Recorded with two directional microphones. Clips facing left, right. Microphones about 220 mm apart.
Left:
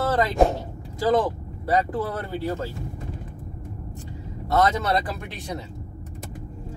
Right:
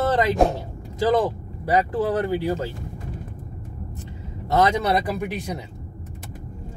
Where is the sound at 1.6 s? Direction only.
15° right (ahead or behind).